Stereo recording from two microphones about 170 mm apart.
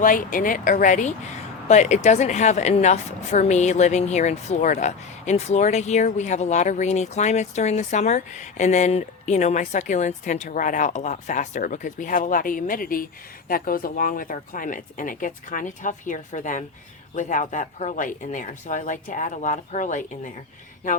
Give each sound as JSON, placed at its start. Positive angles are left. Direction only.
{"t": 0.0, "sound": "a woman's voice", "side_deg": 55}